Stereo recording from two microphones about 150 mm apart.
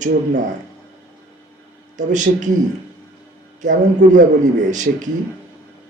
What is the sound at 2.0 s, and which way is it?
Speech, 55° right (ahead or behind).